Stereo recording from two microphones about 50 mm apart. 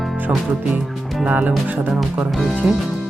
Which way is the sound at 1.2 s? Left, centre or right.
Right.